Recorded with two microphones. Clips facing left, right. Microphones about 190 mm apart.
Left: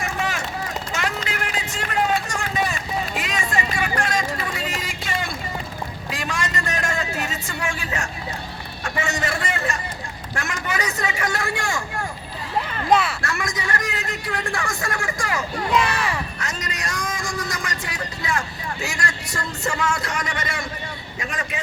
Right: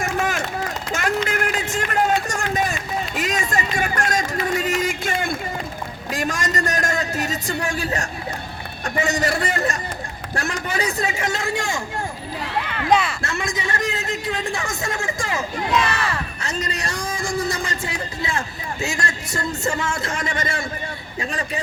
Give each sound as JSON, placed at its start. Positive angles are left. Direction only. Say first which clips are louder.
{"t": 0.0, "sound": "run", "louder": "right 3 dB", "side_deg": -45}
{"t": 3.2, "sound": "a sound", "louder": "right 2 dB", "side_deg": -45}
{"t": 8.8, "sound": "a man's voice", "louder": "right 4 dB", "side_deg": -35}
{"t": 12.9, "sound": "speech", "louder": "even", "side_deg": 5}
{"t": 13.2, "sound": "a man's voice", "louder": "right 1 dB", "side_deg": -25}
{"t": 15.8, "sound": "speech", "louder": "even", "side_deg": 10}
{"t": 16.4, "sound": "a man's voice", "louder": "right 3 dB", "side_deg": -30}